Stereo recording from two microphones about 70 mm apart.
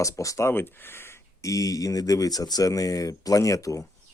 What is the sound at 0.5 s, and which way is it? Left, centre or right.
Speech, left.